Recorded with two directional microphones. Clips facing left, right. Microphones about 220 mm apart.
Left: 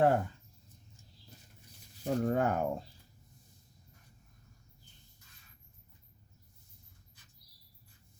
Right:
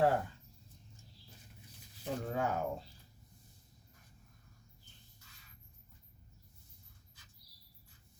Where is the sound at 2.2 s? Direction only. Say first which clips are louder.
Left 5 dB; 55° left (ahead or behind).